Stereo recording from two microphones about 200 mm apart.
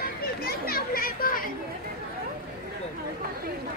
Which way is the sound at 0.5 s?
50° left (ahead or behind).